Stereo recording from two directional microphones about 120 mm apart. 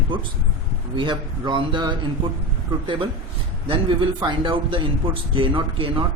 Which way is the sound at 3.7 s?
40° right (ahead or behind).